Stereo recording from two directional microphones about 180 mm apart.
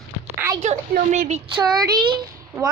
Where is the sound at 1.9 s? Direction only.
25° right (ahead or behind).